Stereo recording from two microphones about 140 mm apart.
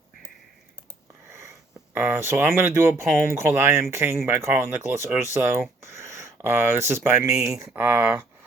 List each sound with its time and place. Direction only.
1.9 s speech: 15° right (ahead or behind)